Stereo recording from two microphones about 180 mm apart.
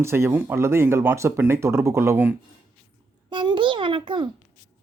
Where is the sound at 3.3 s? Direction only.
25° right (ahead or behind).